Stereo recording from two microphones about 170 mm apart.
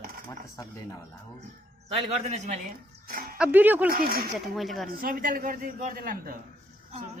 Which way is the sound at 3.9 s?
60° right (ahead or behind).